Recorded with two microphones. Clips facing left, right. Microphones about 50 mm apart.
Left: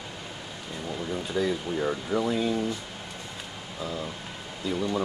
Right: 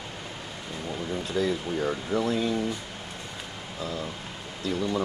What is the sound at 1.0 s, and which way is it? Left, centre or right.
Speech, centre.